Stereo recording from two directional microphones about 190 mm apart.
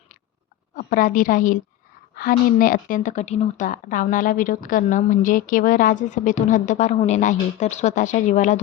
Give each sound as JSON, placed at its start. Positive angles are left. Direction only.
{"t": 0.8, "sound": "a woman's voice", "side_deg": 45}